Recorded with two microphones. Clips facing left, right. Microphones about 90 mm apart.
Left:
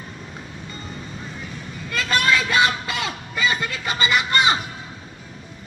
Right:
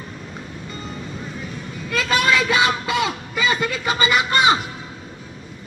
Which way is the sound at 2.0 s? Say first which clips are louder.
Right 2 dB; 20° right (ahead or behind).